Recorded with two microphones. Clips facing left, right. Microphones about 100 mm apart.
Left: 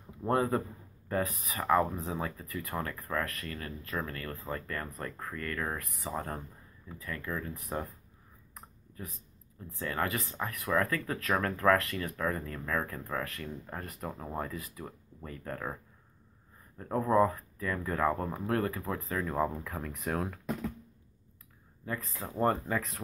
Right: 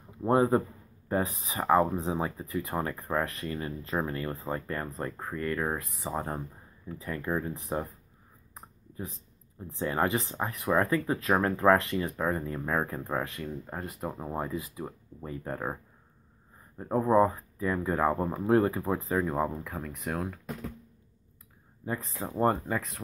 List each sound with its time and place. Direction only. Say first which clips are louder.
0.2 s speech: right 5 dB; 20° right (ahead or behind)
8.5 s a sound: right 5 dB; 20° right (ahead or behind)
9.6 s speech: right 5 dB; 25° right (ahead or behind); by 20.3 s centre (ahead or behind)
21.8 s speech: right 4 dB; 25° right (ahead or behind)
22.4 s speech: right 2 dB; 15° right (ahead or behind)
22.8 s speech: even; centre (ahead or behind)